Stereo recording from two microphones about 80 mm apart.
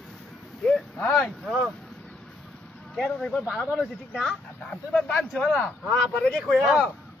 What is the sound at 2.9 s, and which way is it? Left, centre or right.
A man's voice, centre.